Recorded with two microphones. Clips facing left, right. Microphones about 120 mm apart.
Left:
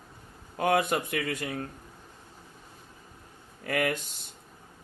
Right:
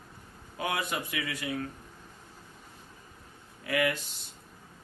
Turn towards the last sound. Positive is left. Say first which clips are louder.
# even
turn(degrees=50)  # may be behind; listen again after turning